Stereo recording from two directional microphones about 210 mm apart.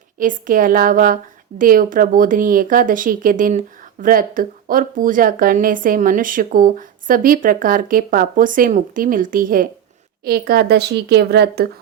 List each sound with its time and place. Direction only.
0.2 s a woman's voice: 40° right (ahead or behind)